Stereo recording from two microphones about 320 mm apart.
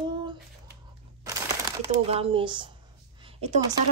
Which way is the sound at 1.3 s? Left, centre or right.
Centre.